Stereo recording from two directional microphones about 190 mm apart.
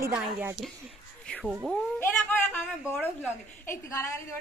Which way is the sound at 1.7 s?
5° left (ahead or behind).